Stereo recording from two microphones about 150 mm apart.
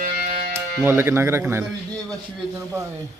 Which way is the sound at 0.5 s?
15° right (ahead or behind).